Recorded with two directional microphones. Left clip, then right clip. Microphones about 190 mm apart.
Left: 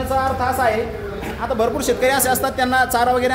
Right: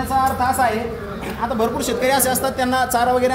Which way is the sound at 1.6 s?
30° left (ahead or behind).